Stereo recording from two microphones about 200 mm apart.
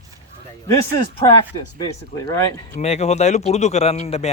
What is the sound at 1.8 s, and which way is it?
Speech, 25° left (ahead or behind).